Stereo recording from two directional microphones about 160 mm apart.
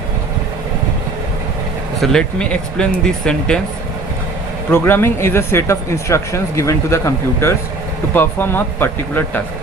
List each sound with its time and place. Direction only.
2.0 s speech: 5° left (ahead or behind)
4.7 s speech: 15° left (ahead or behind)